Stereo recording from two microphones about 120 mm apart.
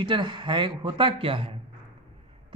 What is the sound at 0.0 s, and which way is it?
Speech, 40° right (ahead or behind).